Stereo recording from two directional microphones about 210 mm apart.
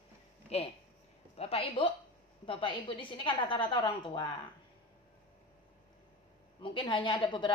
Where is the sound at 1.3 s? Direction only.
30° left (ahead or behind).